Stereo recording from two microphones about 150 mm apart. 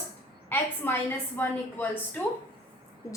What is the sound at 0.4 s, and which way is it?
A woman's voice, 15° left (ahead or behind).